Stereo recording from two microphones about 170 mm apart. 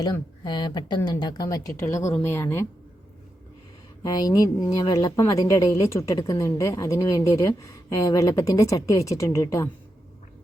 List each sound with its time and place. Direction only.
0.0 s a woman's voice: 25° left (ahead or behind)
4.0 s a woman's voice: 20° left (ahead or behind)